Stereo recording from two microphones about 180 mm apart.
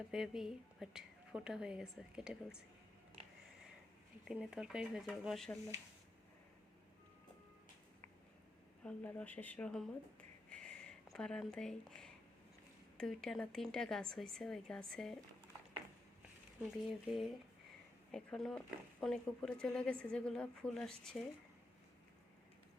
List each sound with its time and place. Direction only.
0.1 s speech: 5° right (ahead or behind)
3.2 s a sound: 35° right (ahead or behind)
4.3 s speech: 5° right (ahead or behind)
8.8 s speech: 5° left (ahead or behind)
16.7 s speech: centre (ahead or behind)